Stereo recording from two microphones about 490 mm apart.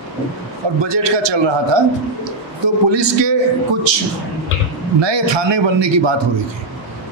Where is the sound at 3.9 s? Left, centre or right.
Right.